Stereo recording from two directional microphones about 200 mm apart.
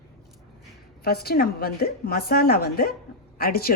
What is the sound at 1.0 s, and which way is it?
A woman's voice, 50° left (ahead or behind).